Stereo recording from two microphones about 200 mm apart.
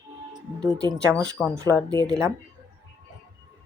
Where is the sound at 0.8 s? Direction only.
15° right (ahead or behind).